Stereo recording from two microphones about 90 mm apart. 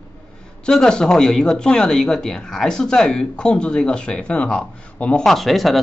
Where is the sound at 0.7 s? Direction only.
5° left (ahead or behind).